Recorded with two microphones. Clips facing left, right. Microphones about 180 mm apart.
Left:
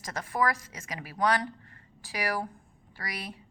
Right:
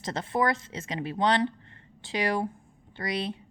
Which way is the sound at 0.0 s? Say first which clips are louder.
Right 3 dB; 25° right (ahead or behind).